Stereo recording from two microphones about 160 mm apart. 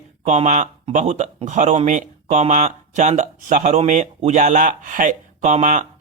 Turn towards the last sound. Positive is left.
turn(degrees=-50)  # may be behind; listen again after turning